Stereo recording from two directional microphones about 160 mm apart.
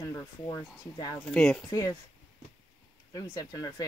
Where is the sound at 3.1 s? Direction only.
25° left (ahead or behind).